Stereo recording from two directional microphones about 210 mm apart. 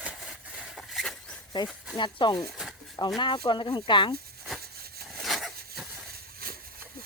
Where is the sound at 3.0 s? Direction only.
20° left (ahead or behind).